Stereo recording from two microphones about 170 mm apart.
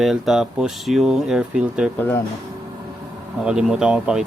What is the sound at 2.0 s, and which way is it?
Speech, 10° left (ahead or behind).